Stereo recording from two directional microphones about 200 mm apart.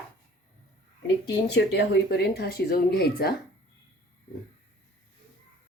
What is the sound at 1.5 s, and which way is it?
Speech, 55° left (ahead or behind).